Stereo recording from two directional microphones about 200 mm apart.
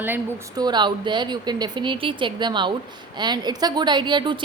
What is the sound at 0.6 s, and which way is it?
Speech, 20° right (ahead or behind).